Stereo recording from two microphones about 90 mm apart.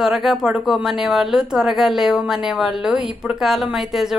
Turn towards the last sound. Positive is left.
turn(degrees=-5)  # may be behind; listen again after turning